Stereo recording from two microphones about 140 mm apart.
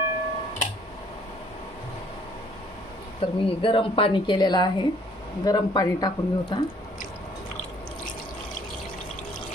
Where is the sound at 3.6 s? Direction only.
40° left (ahead or behind).